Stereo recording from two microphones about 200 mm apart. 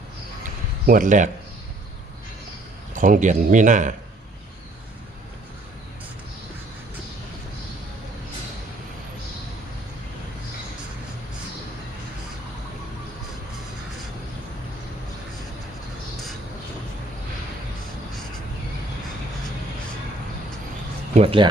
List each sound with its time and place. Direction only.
0.9 s a man's voice: 40° right (ahead or behind)
2.9 s a man's voice: 40° right (ahead or behind)
21.2 s speech: 25° right (ahead or behind)